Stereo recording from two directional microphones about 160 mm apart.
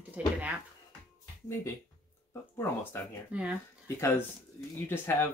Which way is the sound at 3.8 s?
20° left (ahead or behind).